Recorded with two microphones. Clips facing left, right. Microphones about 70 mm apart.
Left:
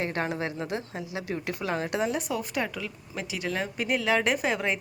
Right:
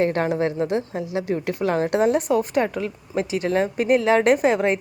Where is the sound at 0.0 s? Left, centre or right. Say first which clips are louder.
Right 9 dB; right.